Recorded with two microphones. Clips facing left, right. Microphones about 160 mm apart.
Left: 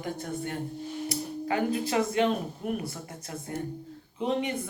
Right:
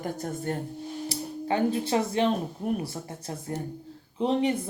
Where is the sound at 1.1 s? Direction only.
30° right (ahead or behind).